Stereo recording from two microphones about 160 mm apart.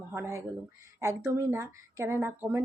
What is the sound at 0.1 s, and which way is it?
A woman's voice, 15° right (ahead or behind).